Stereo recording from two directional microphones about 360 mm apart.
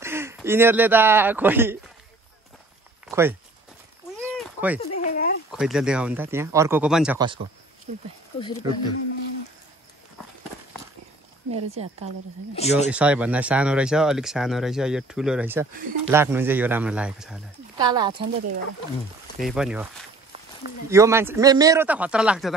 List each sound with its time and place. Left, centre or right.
0.0 s speech: centre
3.1 s speech: centre
4.2 s a sound: centre
4.7 s a sound: centre
5.5 s speech: centre
8.4 s speech: centre
11.5 s speech: centre
12.5 s speech: centre
12.9 s speech: centre
19.3 s speech: centre
20.9 s speech: centre